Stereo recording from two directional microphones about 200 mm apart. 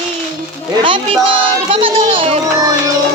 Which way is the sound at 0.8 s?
25° right (ahead or behind).